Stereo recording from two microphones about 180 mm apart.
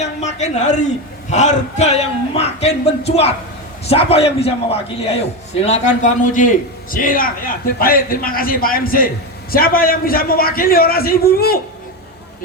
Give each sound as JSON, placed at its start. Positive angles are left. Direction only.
{"t": 0.0, "sound": "a man's voice", "side_deg": 40}